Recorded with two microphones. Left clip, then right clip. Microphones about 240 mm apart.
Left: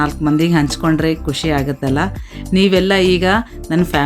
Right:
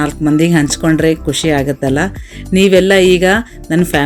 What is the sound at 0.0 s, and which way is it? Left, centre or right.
Speech, centre.